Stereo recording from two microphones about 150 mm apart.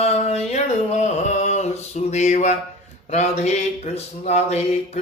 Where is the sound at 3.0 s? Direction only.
50° left (ahead or behind).